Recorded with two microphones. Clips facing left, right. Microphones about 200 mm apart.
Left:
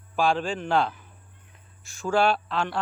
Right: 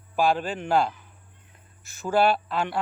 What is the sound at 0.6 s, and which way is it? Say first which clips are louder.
Speech: right 3 dB; 5° right (ahead or behind).